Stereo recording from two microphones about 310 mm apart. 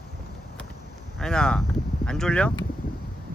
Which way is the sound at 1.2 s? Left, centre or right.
Centre.